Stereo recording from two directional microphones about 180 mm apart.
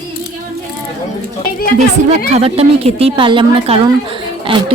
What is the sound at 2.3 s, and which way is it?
A woman's voice, 35° right (ahead or behind).